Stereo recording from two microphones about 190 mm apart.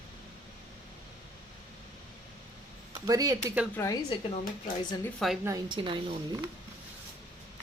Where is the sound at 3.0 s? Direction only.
20° right (ahead or behind).